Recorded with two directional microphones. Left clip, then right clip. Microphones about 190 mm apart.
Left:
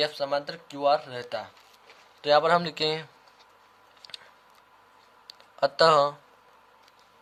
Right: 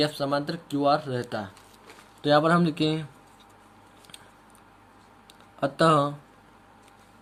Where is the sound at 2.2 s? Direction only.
30° left (ahead or behind).